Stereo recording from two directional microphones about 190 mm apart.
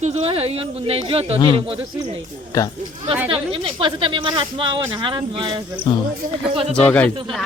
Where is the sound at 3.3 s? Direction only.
30° right (ahead or behind).